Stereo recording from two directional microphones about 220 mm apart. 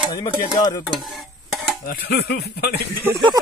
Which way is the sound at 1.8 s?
45° left (ahead or behind).